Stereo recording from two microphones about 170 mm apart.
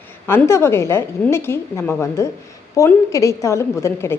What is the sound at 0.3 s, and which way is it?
A woman's voice, 15° left (ahead or behind).